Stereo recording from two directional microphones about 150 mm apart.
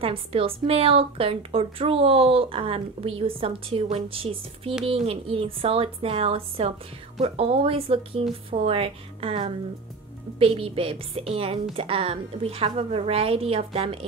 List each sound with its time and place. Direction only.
0.0 s a woman's voice: 40° right (ahead or behind)